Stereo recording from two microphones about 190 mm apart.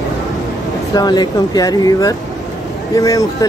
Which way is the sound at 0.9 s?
20° left (ahead or behind).